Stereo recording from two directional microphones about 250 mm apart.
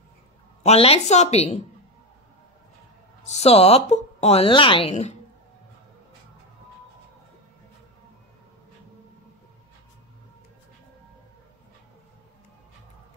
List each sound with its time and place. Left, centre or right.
0.7 s speech: left
3.3 s speech: left